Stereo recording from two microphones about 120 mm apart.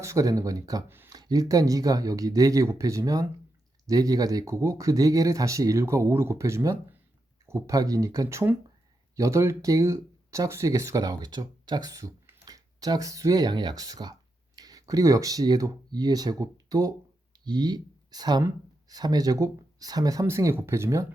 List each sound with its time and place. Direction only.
0.0 s speech: 25° right (ahead or behind)
0.9 s speech: 20° right (ahead or behind)
1.1 s speech: 30° right (ahead or behind)